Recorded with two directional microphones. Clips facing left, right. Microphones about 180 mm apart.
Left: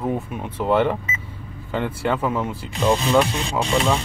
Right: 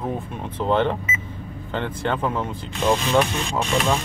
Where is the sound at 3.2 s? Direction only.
30° left (ahead or behind).